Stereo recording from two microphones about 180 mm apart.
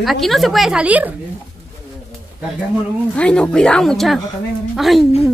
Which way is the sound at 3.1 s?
5° left (ahead or behind).